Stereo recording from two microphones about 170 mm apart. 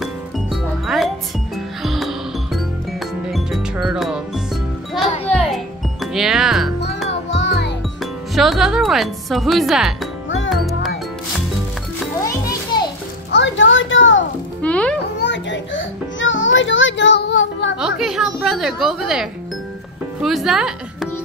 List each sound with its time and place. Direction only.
0.0 s music: centre (ahead or behind)
5.3 s music: centre (ahead or behind)
7.2 s music: 90° left
8.0 s speech: centre (ahead or behind)
10.5 s music: centre (ahead or behind)
12.2 s music: 20° left (ahead or behind)
13.3 s a sound: 90° left
14.6 s music: 5° left (ahead or behind)
15.1 s music: 90° left
17.7 s a sound: 5° right (ahead or behind)
20.2 s music: centre (ahead or behind)